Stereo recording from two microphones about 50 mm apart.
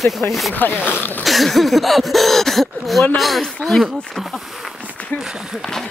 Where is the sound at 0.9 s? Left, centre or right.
Left.